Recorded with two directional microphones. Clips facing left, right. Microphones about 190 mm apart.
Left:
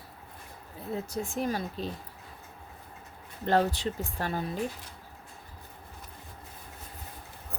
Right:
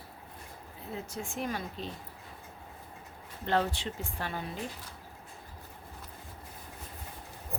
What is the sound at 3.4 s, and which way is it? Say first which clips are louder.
Speech: left 4 dB; 40° left (ahead or behind).